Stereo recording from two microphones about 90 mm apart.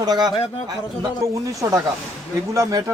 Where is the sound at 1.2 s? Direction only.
35° right (ahead or behind).